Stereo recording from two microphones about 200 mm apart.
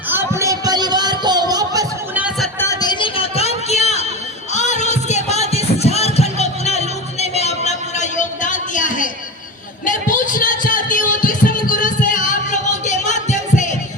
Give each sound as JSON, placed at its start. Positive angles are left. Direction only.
{"t": 0.1, "sound": "music", "side_deg": -15}
{"t": 2.6, "sound": "music", "side_deg": 20}
{"t": 3.7, "sound": "a sound", "side_deg": 35}
{"t": 4.5, "sound": "music", "side_deg": 35}